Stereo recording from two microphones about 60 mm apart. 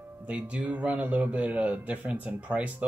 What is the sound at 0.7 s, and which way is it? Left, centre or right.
A man's voice, right.